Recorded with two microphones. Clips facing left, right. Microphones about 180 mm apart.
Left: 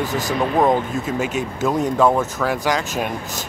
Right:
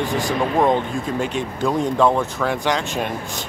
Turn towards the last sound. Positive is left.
turn(degrees=0)  # may be behind; listen again after turning